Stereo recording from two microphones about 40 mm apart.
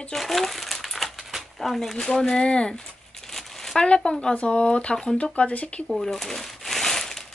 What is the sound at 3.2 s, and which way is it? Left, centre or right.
Crumpling, centre.